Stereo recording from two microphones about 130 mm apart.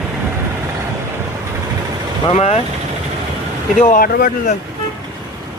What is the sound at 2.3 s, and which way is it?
Speech, 55° left (ahead or behind).